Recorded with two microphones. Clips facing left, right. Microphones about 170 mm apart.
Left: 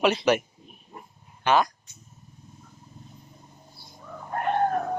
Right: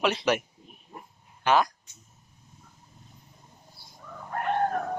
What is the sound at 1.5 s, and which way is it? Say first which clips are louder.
Speech: left 1 dB; 5° right (ahead or behind).